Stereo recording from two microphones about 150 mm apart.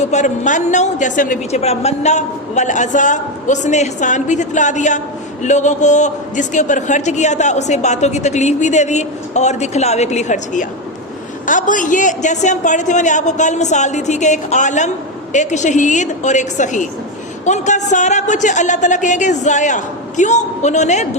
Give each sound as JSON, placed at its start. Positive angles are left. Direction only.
{"t": 0.0, "sound": "a man's voice", "side_deg": 50}